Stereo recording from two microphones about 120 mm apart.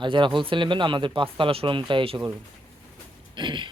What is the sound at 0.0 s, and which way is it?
Speech, 40° right (ahead or behind).